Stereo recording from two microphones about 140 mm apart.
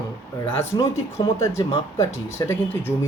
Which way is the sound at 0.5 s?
20° left (ahead or behind).